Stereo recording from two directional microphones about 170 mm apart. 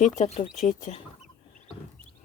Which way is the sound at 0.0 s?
40° left (ahead or behind).